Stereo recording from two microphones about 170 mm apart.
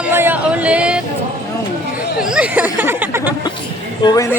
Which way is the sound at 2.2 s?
5° right (ahead or behind).